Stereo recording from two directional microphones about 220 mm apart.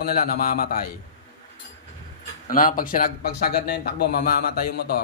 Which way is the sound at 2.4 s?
40° left (ahead or behind).